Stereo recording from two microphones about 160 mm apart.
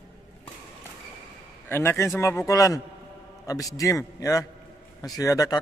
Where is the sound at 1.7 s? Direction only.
15° left (ahead or behind).